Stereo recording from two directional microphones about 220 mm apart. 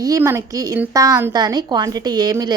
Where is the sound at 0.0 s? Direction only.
15° right (ahead or behind).